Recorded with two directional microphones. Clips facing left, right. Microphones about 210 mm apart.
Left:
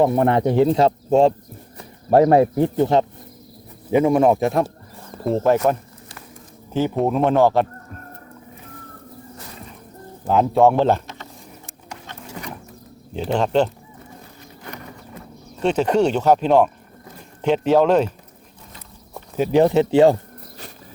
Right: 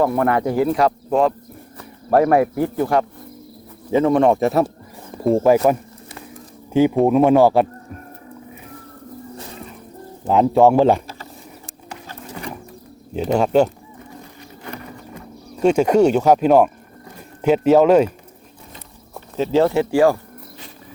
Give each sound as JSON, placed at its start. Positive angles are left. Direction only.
{"t": 0.0, "sound": "speech", "side_deg": 25}
{"t": 3.9, "sound": "speech", "side_deg": 10}
{"t": 6.7, "sound": "speech", "side_deg": -10}
{"t": 10.2, "sound": "speech", "side_deg": 0}
{"t": 13.3, "sound": "speech", "side_deg": -10}
{"t": 15.5, "sound": "speech", "side_deg": -10}
{"t": 19.4, "sound": "speech", "side_deg": 15}